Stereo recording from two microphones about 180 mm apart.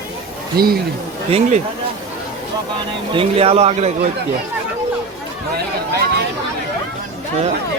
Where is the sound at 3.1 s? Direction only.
30° right (ahead or behind).